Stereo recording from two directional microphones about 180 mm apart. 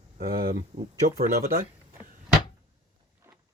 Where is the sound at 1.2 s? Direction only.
55° right (ahead or behind).